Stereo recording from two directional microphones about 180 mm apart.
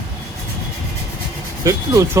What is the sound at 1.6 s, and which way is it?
Speech, 15° right (ahead or behind).